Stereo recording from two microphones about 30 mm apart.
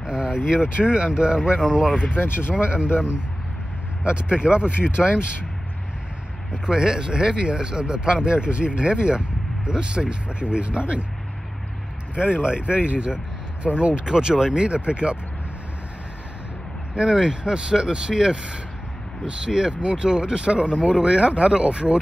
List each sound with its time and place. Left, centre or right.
0.1 s vehicle: right
0.5 s speech: right
2.5 s speech: right
6.5 s speech: right
12.2 s speech: right
13.6 s speech: centre
14.0 s speech: right
16.9 s speech: right